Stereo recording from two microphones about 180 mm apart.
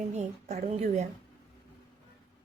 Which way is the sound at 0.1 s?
40° right (ahead or behind).